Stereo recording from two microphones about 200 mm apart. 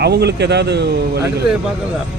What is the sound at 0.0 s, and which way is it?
A man's voice, 55° right (ahead or behind).